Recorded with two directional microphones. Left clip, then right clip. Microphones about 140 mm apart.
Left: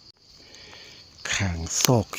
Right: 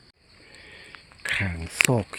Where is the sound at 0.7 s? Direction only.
20° left (ahead or behind).